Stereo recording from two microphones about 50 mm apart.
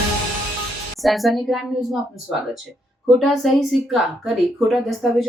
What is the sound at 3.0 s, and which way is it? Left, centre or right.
A woman's voice, centre.